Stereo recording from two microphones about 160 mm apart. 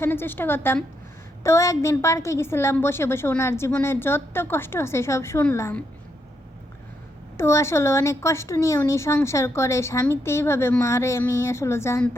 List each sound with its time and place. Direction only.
0.0 s speech: 15° left (ahead or behind)
7.3 s speech: 15° left (ahead or behind)